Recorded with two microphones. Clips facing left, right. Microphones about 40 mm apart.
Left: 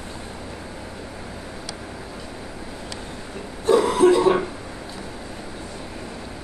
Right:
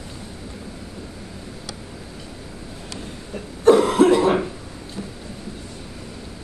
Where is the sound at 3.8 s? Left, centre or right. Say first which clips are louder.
Right 1 dB; right.